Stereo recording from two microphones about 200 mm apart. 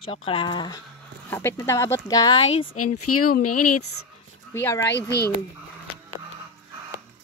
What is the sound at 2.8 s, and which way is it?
Speech, 90° left.